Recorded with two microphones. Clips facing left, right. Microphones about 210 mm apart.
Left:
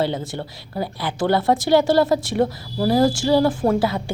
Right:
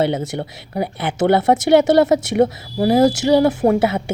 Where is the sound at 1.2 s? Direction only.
70° right (ahead or behind).